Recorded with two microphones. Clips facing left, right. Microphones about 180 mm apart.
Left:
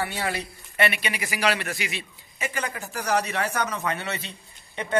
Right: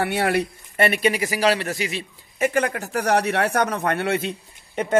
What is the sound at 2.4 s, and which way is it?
A man's voice, 60° right (ahead or behind).